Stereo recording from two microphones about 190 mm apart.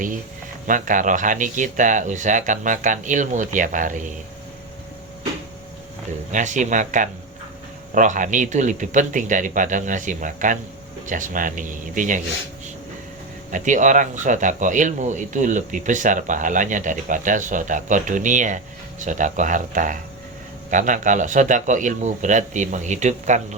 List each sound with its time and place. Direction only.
0.7 s speech: 45° right (ahead or behind)
6.3 s speech: 40° right (ahead or behind)
13.5 s speech: 40° right (ahead or behind)